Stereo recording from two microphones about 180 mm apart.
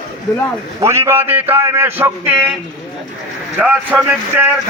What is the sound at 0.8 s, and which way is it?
A man's voice, 15° right (ahead or behind).